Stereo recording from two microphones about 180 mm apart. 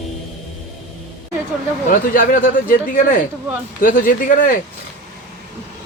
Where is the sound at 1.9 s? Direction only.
50° left (ahead or behind).